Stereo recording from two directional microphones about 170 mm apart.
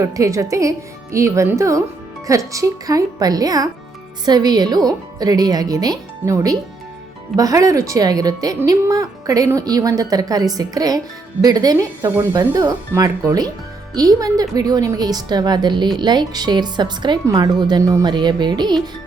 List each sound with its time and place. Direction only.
0.0 s speech: 20° right (ahead or behind)